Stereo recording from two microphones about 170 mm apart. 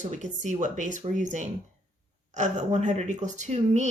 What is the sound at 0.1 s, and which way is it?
A woman's voice, 45° right (ahead or behind).